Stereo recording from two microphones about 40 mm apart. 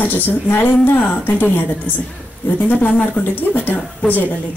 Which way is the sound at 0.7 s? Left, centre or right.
Left.